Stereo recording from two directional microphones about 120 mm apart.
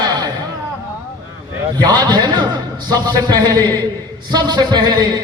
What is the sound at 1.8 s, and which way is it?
A man's voice, 35° right (ahead or behind).